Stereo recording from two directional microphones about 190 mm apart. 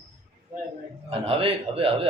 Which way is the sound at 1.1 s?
30° right (ahead or behind).